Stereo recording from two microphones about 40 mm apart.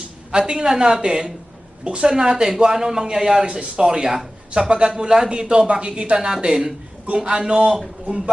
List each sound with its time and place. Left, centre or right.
0.3 s a man's voice: right